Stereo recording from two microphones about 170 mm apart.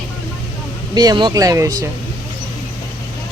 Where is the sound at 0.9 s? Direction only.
25° right (ahead or behind).